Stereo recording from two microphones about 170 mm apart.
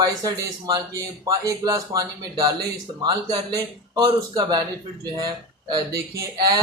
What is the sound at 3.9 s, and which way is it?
Speech, 25° right (ahead or behind).